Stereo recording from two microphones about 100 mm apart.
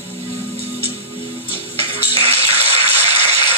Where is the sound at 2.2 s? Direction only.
90° right.